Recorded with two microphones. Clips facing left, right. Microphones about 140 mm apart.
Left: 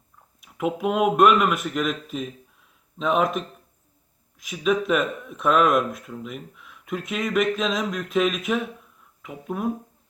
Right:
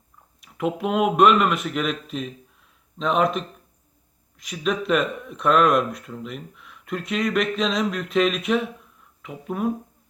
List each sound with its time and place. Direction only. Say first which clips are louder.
0.4 s speech: even; 5° left (ahead or behind)